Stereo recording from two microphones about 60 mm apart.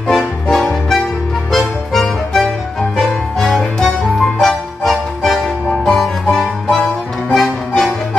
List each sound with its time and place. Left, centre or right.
0.1 s music: centre
5.9 s music: centre